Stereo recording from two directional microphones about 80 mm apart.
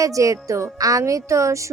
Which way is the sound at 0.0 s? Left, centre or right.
Right.